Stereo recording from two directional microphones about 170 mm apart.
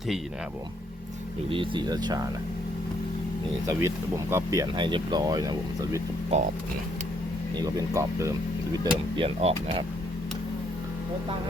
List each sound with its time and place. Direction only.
1.5 s speech: 30° right (ahead or behind)
3.7 s speech: 15° right (ahead or behind)
6.3 s speech: 40° right (ahead or behind)
7.5 s speech: 20° right (ahead or behind)
9.1 s speech: 35° right (ahead or behind)